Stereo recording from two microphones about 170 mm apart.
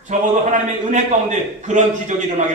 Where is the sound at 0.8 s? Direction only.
45° right (ahead or behind).